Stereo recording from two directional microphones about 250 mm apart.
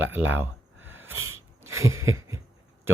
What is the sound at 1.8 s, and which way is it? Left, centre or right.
Speech, centre.